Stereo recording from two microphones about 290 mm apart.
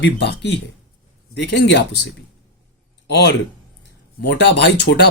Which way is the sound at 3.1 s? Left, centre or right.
Left.